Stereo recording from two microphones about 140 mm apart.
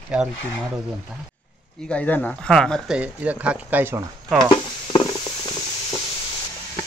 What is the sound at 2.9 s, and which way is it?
Speech, 10° right (ahead or behind).